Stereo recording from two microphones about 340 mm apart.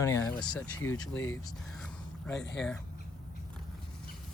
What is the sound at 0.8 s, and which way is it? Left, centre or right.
Speech, left.